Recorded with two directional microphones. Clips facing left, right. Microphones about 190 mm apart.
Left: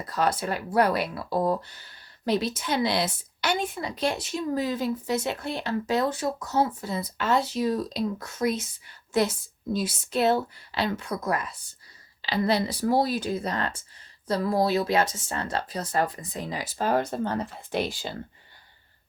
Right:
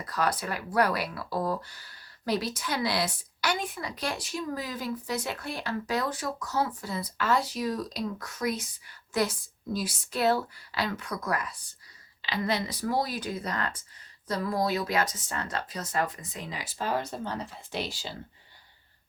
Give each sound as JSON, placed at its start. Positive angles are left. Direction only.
{"t": 0.0, "sound": "speech", "side_deg": 25}